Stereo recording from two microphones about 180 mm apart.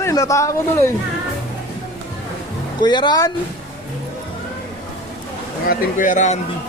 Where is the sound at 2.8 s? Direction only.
25° left (ahead or behind).